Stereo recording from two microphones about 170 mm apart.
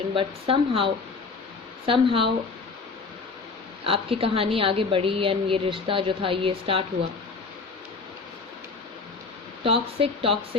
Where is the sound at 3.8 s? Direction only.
35° right (ahead or behind).